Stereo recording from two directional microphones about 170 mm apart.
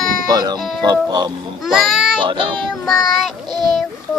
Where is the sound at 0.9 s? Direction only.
25° right (ahead or behind).